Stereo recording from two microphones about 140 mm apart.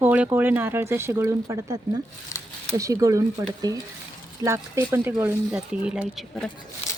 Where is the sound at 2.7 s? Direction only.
25° right (ahead or behind); by 6.5 s centre (ahead or behind).